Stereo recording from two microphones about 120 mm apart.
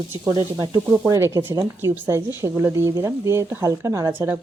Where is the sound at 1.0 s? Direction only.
20° right (ahead or behind).